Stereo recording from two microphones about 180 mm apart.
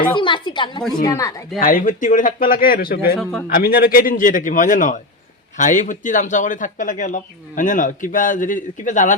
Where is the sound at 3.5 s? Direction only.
55° left (ahead or behind).